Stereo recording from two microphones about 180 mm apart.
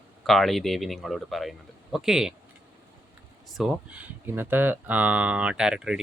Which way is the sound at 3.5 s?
Centre (ahead or behind).